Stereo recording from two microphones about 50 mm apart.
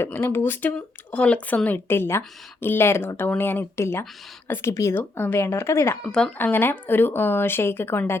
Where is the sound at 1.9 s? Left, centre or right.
Left.